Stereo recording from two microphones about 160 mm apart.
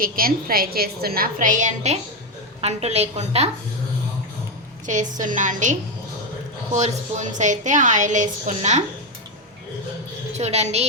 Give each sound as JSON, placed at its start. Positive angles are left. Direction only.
{"t": 0.0, "sound": "a woman's voice", "side_deg": -65}
{"t": 4.9, "sound": "a woman's voice", "side_deg": -50}
{"t": 6.7, "sound": "a woman's voice", "side_deg": -45}
{"t": 10.3, "sound": "a woman's voice", "side_deg": -45}